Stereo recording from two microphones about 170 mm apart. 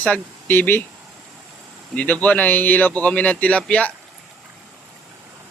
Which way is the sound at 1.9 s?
10° left (ahead or behind).